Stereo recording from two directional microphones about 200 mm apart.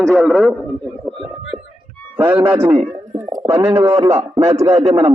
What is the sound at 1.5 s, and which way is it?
Music, 5° left (ahead or behind).